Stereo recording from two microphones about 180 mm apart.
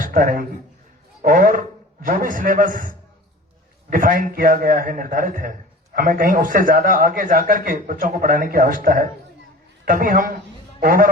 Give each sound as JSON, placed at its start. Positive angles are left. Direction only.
{"t": 0.0, "sound": "a man's voice", "side_deg": -50}